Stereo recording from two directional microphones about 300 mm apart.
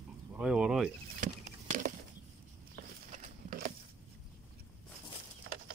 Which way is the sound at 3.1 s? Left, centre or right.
Right.